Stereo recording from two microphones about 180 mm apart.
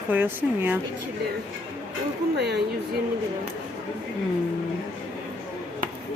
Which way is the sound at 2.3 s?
70° right (ahead or behind).